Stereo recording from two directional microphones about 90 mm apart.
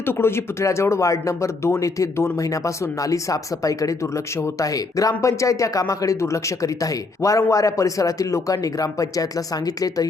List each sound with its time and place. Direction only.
0.0 s speech: 25° left (ahead or behind); by 10.1 s 45° left (ahead or behind)